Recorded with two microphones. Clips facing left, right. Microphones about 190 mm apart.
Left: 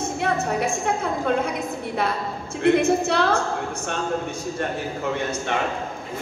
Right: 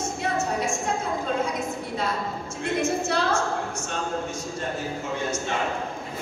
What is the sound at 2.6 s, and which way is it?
Speech, 60° left (ahead or behind).